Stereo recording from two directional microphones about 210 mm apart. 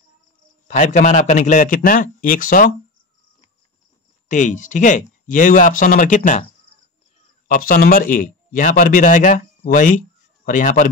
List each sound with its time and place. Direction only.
0.7 s speech: 35° left (ahead or behind)
4.3 s speech: 35° left (ahead or behind)
7.4 s speech: 40° left (ahead or behind)